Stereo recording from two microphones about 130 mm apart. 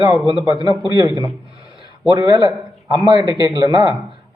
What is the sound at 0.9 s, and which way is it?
A man's voice, 30° right (ahead or behind).